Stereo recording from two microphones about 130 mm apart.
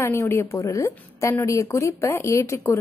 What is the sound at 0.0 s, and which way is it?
A woman's voice, 20° left (ahead or behind).